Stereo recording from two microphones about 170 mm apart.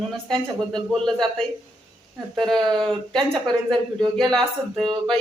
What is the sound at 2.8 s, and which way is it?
Speech, 5° left (ahead or behind).